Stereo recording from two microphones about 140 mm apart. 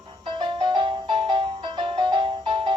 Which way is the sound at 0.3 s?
35° right (ahead or behind).